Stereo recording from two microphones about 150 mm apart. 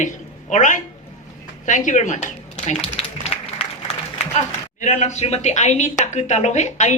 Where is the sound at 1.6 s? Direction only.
60° left (ahead or behind).